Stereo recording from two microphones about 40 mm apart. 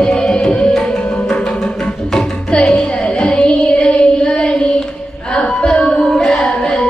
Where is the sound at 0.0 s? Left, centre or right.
Left.